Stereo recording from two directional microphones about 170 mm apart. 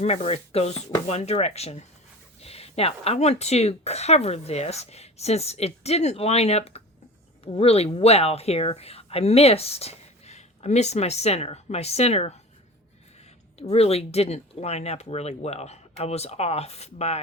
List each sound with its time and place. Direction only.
0.0 s speech: 35° left (ahead or behind)
13.6 s speech: 35° left (ahead or behind)